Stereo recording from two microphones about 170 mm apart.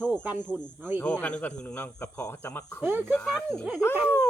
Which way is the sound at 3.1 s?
5° left (ahead or behind).